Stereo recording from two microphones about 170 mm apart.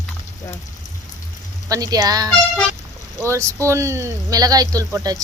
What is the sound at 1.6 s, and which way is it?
Speech, 20° right (ahead or behind).